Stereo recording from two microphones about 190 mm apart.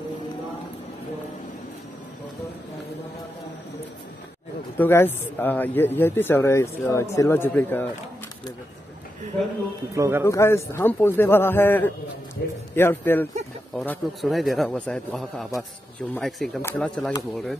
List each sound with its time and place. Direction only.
4.7 s speech: 10° left (ahead or behind)
9.3 s a man's voice: centre (ahead or behind)
9.9 s speech: 15° right (ahead or behind)
10.2 s speech: 15° left (ahead or behind)
12.4 s a man's voice: 60° left (ahead or behind)
12.7 s a man's voice: 10° left (ahead or behind)